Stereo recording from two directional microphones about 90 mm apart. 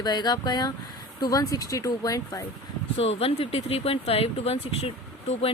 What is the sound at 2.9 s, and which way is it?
Speech, 90° left.